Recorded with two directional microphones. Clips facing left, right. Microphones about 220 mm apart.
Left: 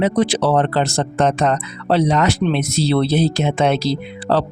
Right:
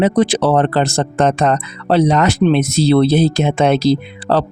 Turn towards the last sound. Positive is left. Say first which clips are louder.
# right 2 dB
turn(degrees=-50)  # may be behind; listen again after turning